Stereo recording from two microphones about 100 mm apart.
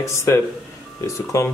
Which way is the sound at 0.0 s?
30° left (ahead or behind).